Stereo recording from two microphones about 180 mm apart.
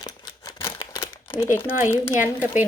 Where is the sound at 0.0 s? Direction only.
20° left (ahead or behind).